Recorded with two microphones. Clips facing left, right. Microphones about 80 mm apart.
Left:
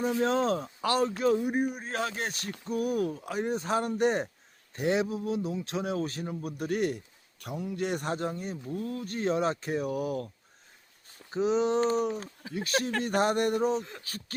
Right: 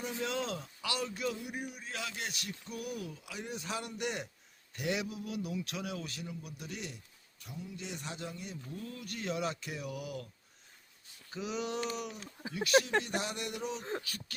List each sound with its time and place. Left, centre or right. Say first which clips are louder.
0.0 s a man's voice: left 10 dB; left